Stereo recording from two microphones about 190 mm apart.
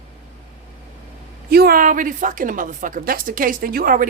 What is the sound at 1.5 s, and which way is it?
A woman's voice, 55° right (ahead or behind).